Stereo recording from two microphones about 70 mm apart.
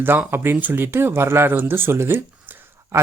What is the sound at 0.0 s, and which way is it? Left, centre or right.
Speech, right.